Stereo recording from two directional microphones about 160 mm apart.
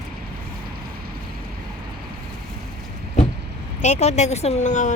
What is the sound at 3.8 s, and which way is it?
Speech, 45° left (ahead or behind).